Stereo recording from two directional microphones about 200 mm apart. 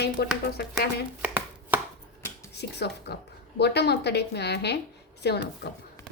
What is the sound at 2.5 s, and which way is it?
Speech, 55° left (ahead or behind).